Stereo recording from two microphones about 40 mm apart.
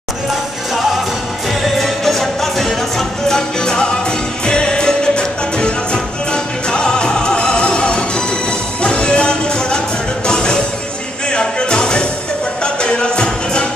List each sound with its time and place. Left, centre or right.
1.8 s music: centre; by 13.7 s left